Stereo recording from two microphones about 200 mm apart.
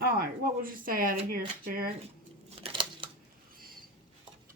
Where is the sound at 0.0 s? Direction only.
45° right (ahead or behind).